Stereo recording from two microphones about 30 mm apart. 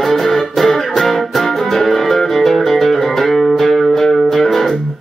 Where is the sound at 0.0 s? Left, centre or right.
Centre.